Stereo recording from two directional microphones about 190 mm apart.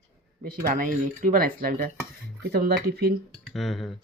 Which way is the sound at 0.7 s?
45° right (ahead or behind).